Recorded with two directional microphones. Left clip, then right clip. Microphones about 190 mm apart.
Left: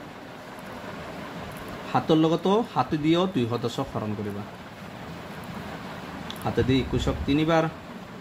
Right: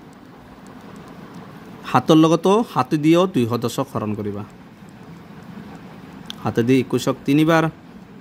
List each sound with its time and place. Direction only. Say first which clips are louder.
1.9 s speech: right 8 dB; 55° right (ahead or behind)
6.2 s speech: right 6 dB; 55° right (ahead or behind)